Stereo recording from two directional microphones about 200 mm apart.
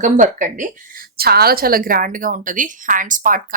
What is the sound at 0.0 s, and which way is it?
A woman's voice, 40° right (ahead or behind).